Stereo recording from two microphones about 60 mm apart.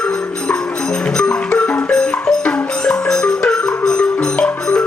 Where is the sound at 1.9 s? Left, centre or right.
Centre.